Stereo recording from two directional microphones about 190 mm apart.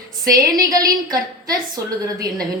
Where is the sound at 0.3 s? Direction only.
20° right (ahead or behind).